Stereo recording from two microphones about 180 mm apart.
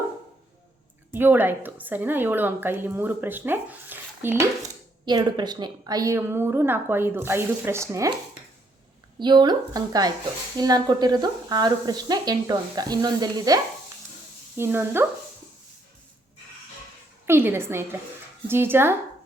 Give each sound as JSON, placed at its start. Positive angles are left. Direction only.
{"t": 1.1, "sound": "a woman's voice", "side_deg": -10}
{"t": 5.0, "sound": "a woman's voice", "side_deg": -25}
{"t": 9.1, "sound": "a woman's voice", "side_deg": -25}
{"t": 17.2, "sound": "a woman's voice", "side_deg": -15}